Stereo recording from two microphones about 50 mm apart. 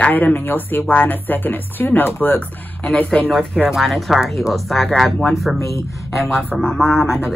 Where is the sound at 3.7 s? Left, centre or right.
Centre.